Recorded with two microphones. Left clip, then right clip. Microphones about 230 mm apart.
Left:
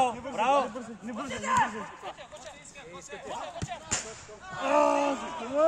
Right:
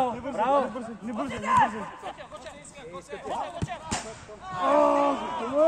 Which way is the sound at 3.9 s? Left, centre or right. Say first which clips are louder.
Even; centre.